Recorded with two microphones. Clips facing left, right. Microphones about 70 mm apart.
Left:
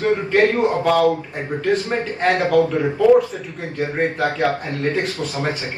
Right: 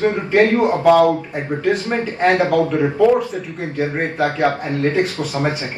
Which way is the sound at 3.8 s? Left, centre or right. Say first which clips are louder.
Right 1 dB; right.